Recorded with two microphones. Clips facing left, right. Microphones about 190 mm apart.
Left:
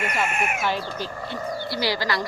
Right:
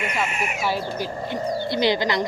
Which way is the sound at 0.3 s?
55° left (ahead or behind).